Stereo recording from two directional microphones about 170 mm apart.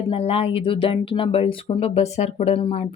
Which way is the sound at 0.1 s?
35° left (ahead or behind).